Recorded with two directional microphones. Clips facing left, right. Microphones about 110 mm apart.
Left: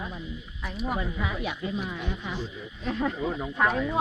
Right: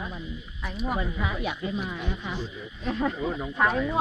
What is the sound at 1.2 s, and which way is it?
Speech, 35° right (ahead or behind).